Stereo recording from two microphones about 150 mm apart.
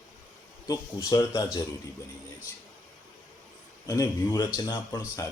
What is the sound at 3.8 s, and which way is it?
Speech, 25° left (ahead or behind).